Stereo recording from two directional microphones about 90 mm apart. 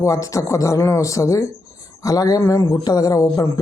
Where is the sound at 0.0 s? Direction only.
40° left (ahead or behind).